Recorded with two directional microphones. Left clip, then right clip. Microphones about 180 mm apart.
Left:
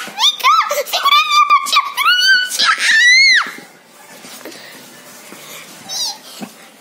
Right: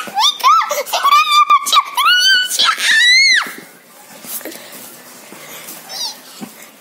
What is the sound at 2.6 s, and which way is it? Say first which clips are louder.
Screaming: left 1 dB; 20° right (ahead or behind).